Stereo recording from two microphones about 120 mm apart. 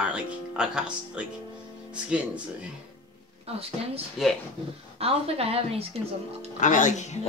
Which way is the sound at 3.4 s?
55° right (ahead or behind).